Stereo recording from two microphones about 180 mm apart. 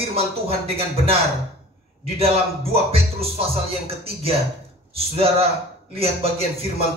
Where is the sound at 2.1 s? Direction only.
35° right (ahead or behind).